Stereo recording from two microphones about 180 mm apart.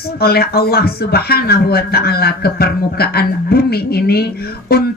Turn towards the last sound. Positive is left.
turn(degrees=60)  # may be behind; listen again after turning